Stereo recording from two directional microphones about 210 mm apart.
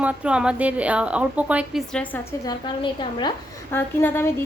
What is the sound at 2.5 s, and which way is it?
Speech, 25° left (ahead or behind).